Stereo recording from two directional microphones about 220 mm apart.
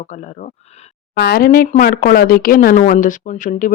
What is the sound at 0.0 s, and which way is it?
Speech, 35° left (ahead or behind).